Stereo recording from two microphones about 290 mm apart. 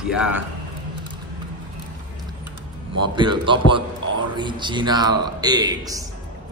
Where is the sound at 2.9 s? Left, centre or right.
Centre.